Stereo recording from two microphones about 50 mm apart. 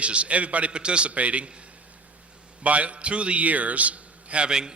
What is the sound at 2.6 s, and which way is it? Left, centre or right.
A man's voice, right.